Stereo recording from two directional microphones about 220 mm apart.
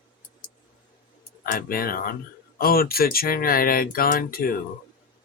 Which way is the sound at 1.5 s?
40° left (ahead or behind).